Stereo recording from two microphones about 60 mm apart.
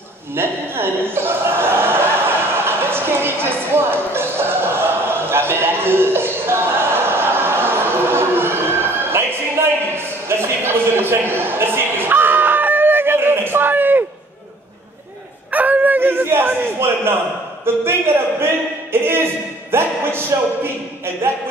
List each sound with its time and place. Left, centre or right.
0.3 s chuckle: right
9.6 s a sound: right
15.5 s dog: right
17.8 s speech: right